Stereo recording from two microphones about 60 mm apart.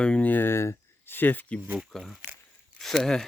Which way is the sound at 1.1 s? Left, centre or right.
Left.